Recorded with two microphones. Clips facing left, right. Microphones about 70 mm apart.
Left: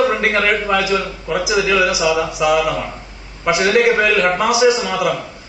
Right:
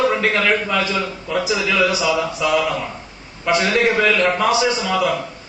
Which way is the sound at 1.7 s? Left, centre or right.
Centre.